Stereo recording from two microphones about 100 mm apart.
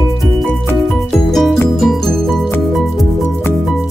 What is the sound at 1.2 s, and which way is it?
Music, 5° left (ahead or behind).